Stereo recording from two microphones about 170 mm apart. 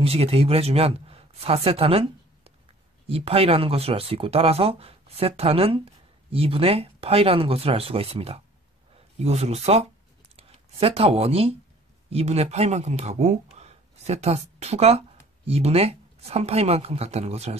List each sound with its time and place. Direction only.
0.0 s speech: 35° right (ahead or behind)